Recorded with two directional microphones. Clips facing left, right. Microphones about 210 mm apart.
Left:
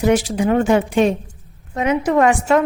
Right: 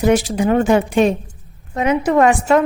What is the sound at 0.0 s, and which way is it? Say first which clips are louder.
A woman's voice: right 1 dB; 40° right (ahead or behind).